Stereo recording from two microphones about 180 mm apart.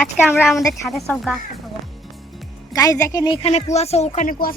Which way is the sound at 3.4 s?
35° left (ahead or behind).